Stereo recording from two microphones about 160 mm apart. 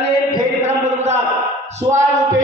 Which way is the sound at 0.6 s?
45° right (ahead or behind).